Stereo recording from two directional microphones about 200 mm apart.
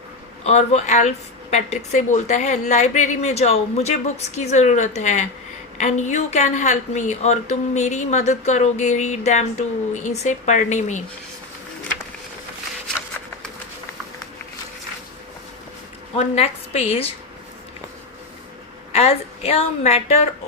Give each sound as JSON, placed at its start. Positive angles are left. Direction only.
{"t": 0.4, "sound": "a woman's voice", "side_deg": 35}
{"t": 16.1, "sound": "a woman's voice", "side_deg": 35}
{"t": 18.9, "sound": "a woman's voice", "side_deg": 30}